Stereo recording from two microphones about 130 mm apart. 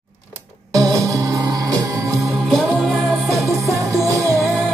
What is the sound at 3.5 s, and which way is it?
Music, 25° right (ahead or behind).